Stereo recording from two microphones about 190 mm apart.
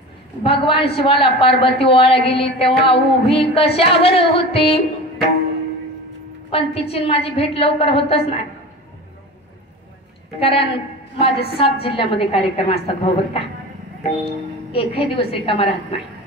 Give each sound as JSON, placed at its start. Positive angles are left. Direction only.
{"t": 0.4, "sound": "a woman's voice", "side_deg": 30}
{"t": 6.5, "sound": "a woman's voice", "side_deg": 30}
{"t": 10.4, "sound": "a woman's voice", "side_deg": 30}
{"t": 14.7, "sound": "a woman's voice", "side_deg": 30}